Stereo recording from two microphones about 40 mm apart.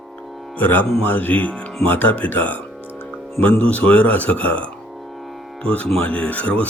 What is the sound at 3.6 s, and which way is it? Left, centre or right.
A man's voice, left.